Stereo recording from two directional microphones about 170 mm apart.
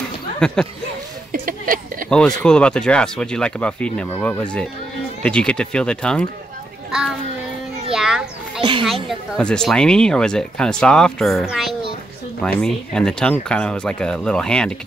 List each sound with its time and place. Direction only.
0.4 s speech: 5° left (ahead or behind)
1.3 s a sound: 55° right (ahead or behind)
2.0 s a child's voice: 5° left (ahead or behind)